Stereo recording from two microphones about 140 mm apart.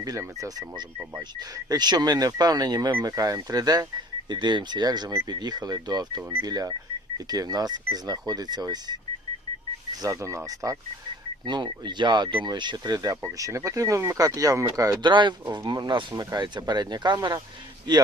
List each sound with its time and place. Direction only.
0.0 s speech: 25° right (ahead or behind)
10.0 s speech: 20° right (ahead or behind)